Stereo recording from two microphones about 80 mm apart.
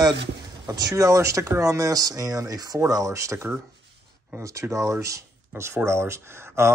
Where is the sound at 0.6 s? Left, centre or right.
Right.